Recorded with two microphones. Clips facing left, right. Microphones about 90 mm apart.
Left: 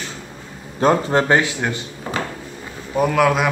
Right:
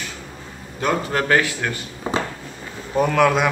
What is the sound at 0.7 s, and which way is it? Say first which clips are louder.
A man's voice: left 5 dB; 30° left (ahead or behind).